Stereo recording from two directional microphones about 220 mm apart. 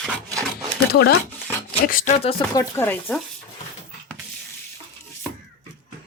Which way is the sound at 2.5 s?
10° left (ahead or behind).